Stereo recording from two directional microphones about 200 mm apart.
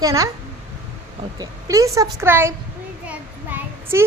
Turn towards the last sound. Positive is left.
turn(degrees=-10)  # may be behind; listen again after turning